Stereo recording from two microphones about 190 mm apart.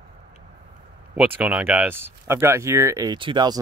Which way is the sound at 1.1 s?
10° right (ahead or behind).